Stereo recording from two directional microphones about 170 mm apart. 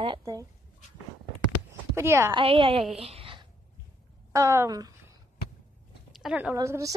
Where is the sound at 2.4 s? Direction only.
30° right (ahead or behind).